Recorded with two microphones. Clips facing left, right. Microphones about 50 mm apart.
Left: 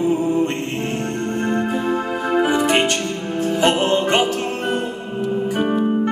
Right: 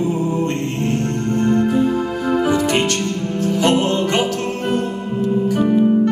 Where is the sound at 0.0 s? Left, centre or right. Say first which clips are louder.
Left 1 dB; centre.